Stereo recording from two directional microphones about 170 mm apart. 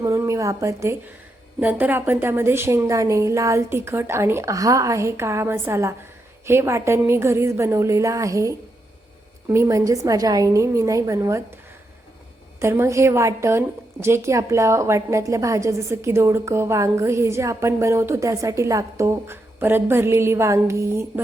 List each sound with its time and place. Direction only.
0.0 s a woman's voice: 15° right (ahead or behind)
12.5 s a woman's voice: 15° right (ahead or behind)